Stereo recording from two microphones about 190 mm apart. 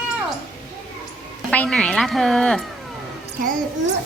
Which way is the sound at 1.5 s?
5° left (ahead or behind).